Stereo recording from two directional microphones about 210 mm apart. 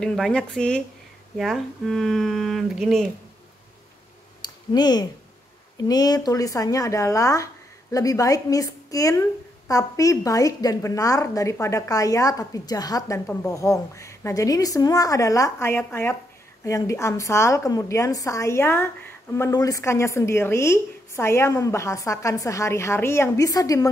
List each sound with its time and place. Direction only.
0.0 s speech: centre (ahead or behind)
4.4 s a sound: 20° left (ahead or behind)
5.9 s a woman's voice: 20° left (ahead or behind)